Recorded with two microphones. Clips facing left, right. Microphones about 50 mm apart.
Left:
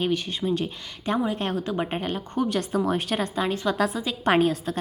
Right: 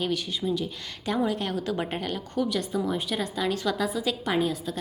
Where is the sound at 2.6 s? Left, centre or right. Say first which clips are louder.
Left 3 dB; left.